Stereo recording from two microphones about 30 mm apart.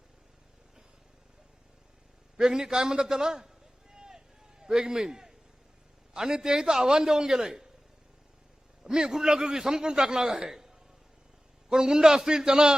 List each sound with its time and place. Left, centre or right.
2.4 s a man's voice: right
3.9 s vehicle: right
4.6 s a man's voice: right
8.8 s a man's voice: right